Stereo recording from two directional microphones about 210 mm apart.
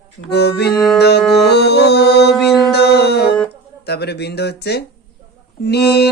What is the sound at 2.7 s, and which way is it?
Speech, 50° left (ahead or behind).